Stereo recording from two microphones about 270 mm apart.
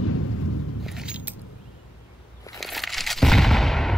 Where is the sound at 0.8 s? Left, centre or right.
Centre.